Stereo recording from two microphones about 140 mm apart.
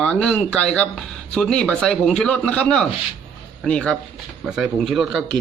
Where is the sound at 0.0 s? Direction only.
10° left (ahead or behind).